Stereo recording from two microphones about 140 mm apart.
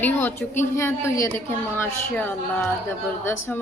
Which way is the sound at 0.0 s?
15° left (ahead or behind).